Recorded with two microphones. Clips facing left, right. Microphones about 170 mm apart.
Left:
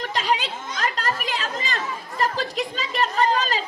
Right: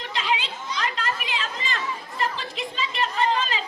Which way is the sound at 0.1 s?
40° left (ahead or behind).